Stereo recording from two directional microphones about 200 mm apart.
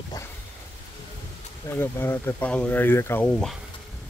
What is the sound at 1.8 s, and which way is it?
Speech, 10° left (ahead or behind).